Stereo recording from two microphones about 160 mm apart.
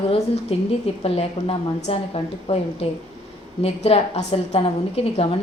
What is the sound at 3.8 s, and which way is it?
A woman's voice, 40° left (ahead or behind).